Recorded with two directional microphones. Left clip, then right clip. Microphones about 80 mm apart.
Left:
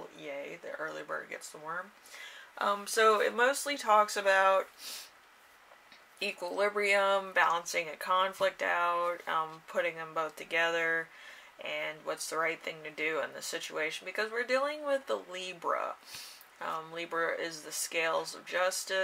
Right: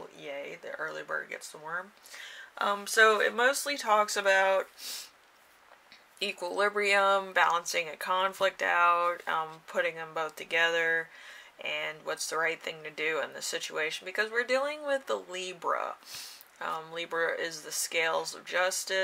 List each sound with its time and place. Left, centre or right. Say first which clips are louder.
0.2 s speech: right 2 dB; right
6.1 s speech: right 2 dB; right